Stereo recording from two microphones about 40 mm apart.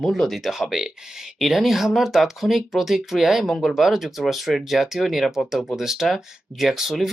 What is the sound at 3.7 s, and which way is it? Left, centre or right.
Speech, centre.